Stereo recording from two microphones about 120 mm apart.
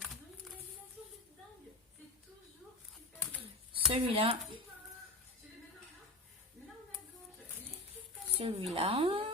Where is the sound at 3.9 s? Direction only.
50° right (ahead or behind).